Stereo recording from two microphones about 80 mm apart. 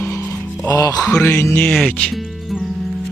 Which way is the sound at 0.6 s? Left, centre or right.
Left.